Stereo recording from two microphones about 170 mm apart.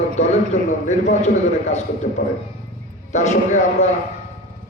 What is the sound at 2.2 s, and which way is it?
Speech, 65° left (ahead or behind).